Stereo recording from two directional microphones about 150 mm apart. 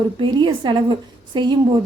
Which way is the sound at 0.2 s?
30° right (ahead or behind).